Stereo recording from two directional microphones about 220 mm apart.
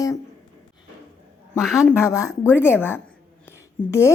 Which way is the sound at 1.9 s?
15° left (ahead or behind).